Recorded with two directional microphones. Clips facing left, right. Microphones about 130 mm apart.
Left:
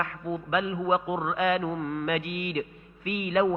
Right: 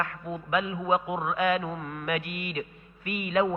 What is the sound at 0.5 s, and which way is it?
A man's voice, 25° left (ahead or behind).